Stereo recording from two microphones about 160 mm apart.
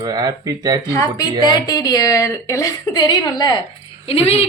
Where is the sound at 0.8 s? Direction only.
20° left (ahead or behind); by 4.4 s 40° left (ahead or behind).